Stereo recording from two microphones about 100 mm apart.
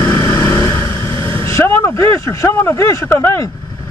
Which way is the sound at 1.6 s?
30° left (ahead or behind).